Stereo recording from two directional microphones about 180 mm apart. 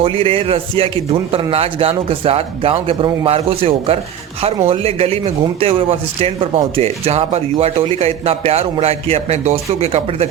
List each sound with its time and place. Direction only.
0.0 s speech: 30° right (ahead or behind)